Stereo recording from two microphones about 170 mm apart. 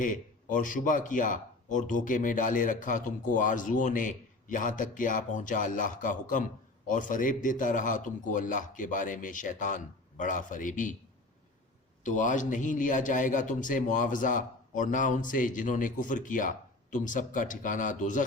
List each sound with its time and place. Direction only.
0.0 s speech: 50° left (ahead or behind)
12.0 s speech: 45° left (ahead or behind)